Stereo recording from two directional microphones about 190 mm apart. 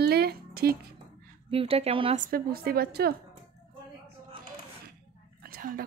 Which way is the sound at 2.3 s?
50° right (ahead or behind).